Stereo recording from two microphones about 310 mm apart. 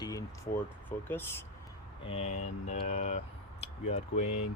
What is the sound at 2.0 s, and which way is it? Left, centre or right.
Speech, centre.